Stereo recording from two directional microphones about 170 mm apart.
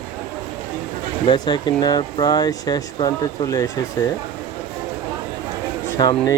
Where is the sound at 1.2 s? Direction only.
25° left (ahead or behind).